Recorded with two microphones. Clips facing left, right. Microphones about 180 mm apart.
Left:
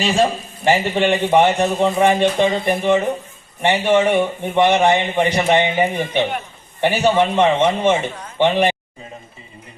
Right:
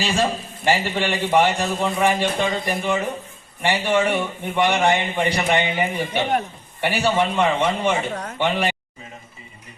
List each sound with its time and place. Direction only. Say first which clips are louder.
0.6 s a man's voice: left 5 dB; 20° left (ahead or behind)
8.1 s a sound: right 5 dB; 65° right (ahead or behind)
8.4 s a man's voice: left 7 dB; 20° left (ahead or behind)